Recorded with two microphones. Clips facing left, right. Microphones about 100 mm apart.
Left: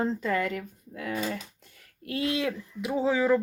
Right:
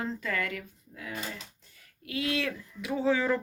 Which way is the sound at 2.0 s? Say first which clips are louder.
Left 3 dB; 40° left (ahead or behind).